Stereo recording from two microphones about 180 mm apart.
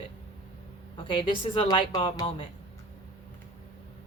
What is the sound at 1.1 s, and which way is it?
A woman's voice, 25° left (ahead or behind).